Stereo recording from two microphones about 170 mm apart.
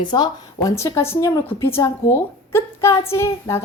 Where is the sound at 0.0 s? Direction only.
25° left (ahead or behind).